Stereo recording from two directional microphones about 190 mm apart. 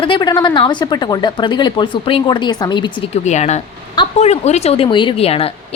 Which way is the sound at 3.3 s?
35° left (ahead or behind).